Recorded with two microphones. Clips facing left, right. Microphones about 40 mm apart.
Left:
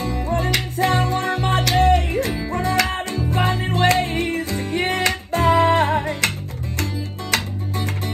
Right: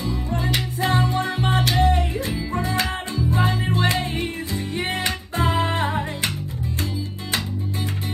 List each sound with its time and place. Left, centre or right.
0.0 s music: left
6.8 s music: left